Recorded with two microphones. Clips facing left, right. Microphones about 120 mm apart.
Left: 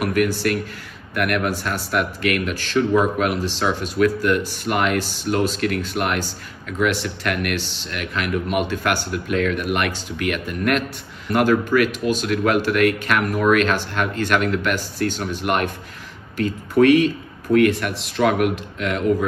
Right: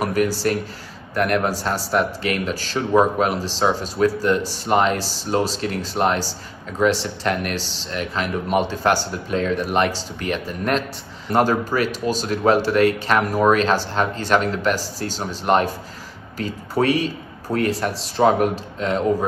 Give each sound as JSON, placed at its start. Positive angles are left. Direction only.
{"t": 0.3, "sound": "speech", "side_deg": -30}
{"t": 16.7, "sound": "speech", "side_deg": -30}